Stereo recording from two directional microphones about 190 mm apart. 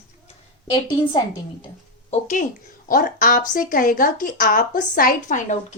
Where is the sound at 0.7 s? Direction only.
25° left (ahead or behind).